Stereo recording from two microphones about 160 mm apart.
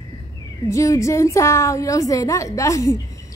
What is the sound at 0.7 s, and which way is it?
A woman's voice, 20° left (ahead or behind).